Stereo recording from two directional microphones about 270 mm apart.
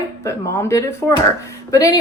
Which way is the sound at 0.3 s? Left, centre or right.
Centre.